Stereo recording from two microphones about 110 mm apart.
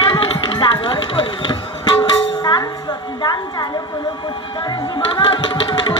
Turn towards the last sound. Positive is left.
turn(degrees=45)  # may be behind; listen again after turning